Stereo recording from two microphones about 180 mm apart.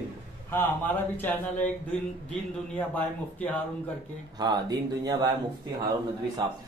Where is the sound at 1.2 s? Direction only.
10° left (ahead or behind).